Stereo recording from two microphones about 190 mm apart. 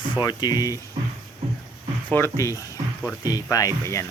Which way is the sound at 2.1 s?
15° left (ahead or behind).